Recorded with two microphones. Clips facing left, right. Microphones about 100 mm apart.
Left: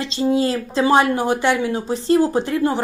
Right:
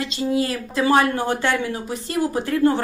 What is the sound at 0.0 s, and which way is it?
Speech, 25° left (ahead or behind).